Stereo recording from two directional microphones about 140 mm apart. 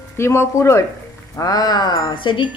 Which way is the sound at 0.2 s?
20° left (ahead or behind).